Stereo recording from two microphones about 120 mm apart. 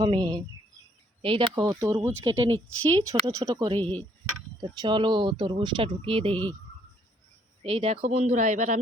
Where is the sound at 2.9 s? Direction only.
30° right (ahead or behind).